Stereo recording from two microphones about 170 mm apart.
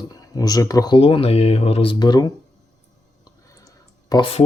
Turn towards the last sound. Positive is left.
turn(degrees=30)  # may be behind; listen again after turning